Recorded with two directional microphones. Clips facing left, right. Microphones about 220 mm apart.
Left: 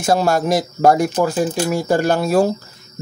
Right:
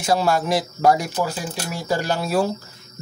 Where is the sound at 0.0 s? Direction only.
45° left (ahead or behind).